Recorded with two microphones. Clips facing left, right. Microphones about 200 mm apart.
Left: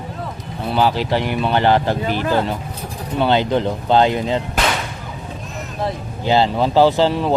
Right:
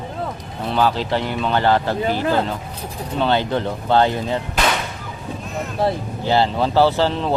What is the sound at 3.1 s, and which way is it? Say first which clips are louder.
Speech: left 3 dB; 15° left (ahead or behind).